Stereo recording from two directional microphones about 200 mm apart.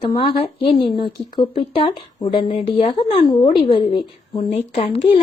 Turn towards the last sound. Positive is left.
turn(degrees=30)  # may be behind; listen again after turning